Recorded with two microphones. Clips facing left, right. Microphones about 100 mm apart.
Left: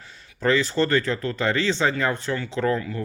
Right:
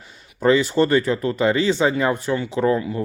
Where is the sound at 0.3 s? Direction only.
15° right (ahead or behind).